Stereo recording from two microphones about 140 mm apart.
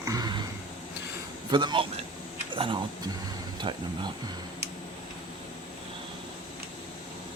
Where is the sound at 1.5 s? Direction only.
35° right (ahead or behind).